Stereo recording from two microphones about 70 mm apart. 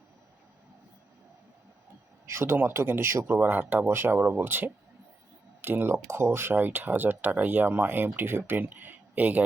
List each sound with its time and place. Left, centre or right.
2.2 s speech: right